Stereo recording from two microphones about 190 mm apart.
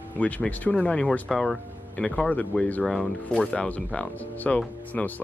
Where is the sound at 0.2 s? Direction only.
5° left (ahead or behind).